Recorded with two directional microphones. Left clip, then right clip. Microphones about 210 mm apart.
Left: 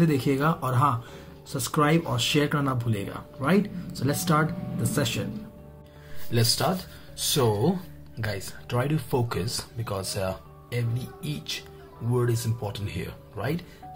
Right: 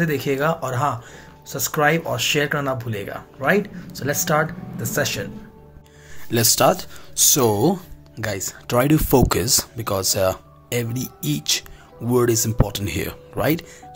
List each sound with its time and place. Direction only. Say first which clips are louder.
0.0 s speech: right 4 dB; 10° left (ahead or behind)
6.3 s speech: right 9 dB; 50° right (ahead or behind)